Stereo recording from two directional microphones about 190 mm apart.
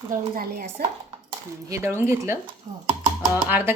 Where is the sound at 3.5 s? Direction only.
10° right (ahead or behind).